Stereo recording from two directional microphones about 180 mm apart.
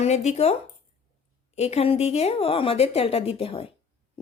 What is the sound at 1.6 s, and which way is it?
A woman's voice, 35° left (ahead or behind).